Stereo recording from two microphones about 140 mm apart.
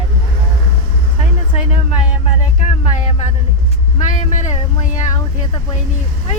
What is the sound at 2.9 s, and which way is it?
Speech, 60° left (ahead or behind).